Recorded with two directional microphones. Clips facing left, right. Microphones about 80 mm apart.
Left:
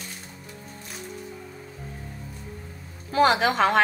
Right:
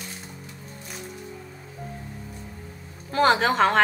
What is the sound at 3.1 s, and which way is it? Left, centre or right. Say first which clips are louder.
Speech: even; right.